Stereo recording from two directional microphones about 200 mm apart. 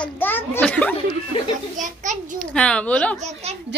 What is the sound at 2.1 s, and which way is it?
Speech, 40° right (ahead or behind).